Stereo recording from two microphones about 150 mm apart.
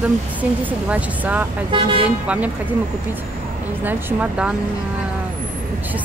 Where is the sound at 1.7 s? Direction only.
35° right (ahead or behind).